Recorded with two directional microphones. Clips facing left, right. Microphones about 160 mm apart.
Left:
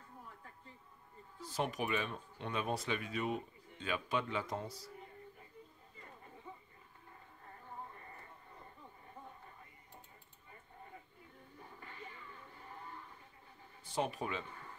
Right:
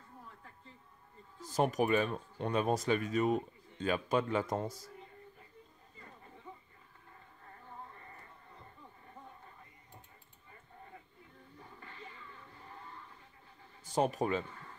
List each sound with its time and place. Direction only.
1.4 s speech: 45° right (ahead or behind)
13.8 s speech: 40° right (ahead or behind)